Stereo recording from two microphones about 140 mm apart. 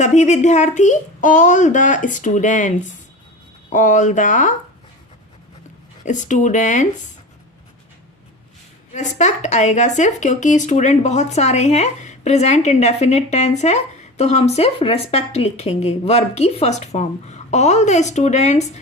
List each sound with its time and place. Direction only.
0.0 s a woman's voice: 55° left (ahead or behind)
6.1 s a woman's voice: 60° left (ahead or behind)
8.9 s a woman's voice: 55° left (ahead or behind)